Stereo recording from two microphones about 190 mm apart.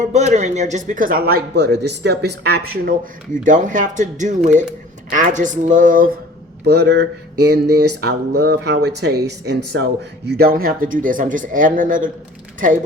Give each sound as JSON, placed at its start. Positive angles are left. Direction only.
{"t": 0.0, "sound": "speech", "side_deg": -35}
{"t": 6.7, "sound": "mantra", "side_deg": -60}
{"t": 10.2, "sound": "speech", "side_deg": -55}